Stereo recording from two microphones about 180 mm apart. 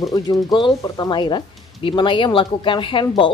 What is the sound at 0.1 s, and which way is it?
A woman's voice, 25° left (ahead or behind).